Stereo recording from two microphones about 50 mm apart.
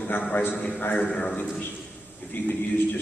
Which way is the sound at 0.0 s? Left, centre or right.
Left.